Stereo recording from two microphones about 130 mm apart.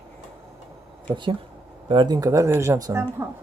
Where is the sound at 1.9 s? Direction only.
35° right (ahead or behind).